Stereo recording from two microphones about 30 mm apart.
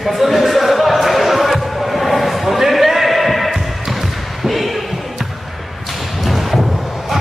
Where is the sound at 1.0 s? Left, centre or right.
Centre.